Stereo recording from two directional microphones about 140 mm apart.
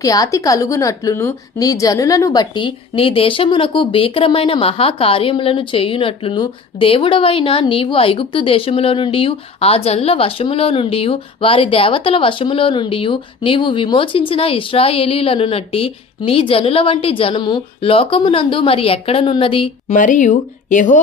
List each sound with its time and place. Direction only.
0.0 s a woman's voice: 25° left (ahead or behind); by 19.7 s 40° left (ahead or behind)
19.9 s speech: 65° left (ahead or behind)